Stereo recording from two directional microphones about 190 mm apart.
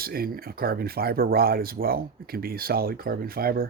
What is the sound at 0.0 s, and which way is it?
Speech, 50° right (ahead or behind).